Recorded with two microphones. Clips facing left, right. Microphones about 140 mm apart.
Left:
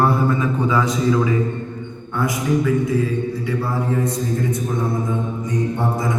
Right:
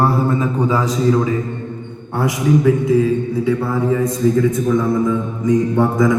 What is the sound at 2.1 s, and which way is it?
Speech, 90° right.